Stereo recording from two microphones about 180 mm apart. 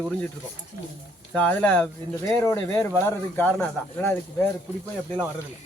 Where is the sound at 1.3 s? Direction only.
5° left (ahead or behind).